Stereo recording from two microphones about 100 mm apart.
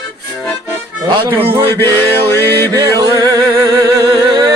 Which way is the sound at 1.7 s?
25° left (ahead or behind).